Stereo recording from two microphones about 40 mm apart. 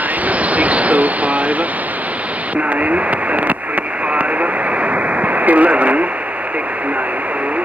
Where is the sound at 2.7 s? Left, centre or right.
Right.